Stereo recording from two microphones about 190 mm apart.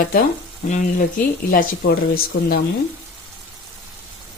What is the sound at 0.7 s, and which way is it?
Frying, 40° left (ahead or behind).